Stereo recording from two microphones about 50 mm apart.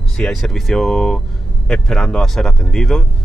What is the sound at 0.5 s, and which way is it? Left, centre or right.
Speech, centre.